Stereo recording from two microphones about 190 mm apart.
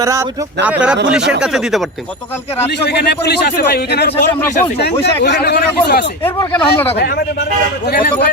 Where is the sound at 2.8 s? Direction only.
60° left (ahead or behind).